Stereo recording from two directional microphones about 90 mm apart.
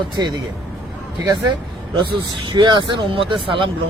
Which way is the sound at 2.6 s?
60° right (ahead or behind).